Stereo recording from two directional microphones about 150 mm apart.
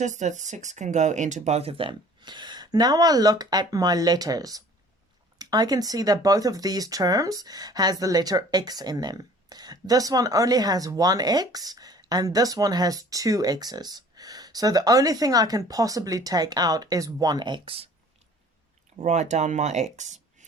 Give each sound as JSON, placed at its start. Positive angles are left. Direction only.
{"t": 0.0, "sound": "speech", "side_deg": -50}
{"t": 18.9, "sound": "speech", "side_deg": -50}